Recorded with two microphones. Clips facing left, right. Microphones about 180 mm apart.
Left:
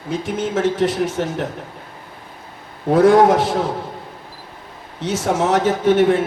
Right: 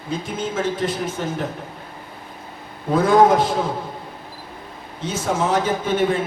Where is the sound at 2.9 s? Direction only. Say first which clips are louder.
Left 3 dB; 75° left (ahead or behind).